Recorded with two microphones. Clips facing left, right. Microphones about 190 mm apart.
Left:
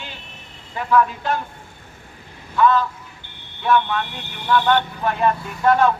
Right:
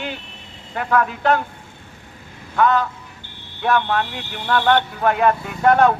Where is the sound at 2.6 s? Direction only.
55° right (ahead or behind).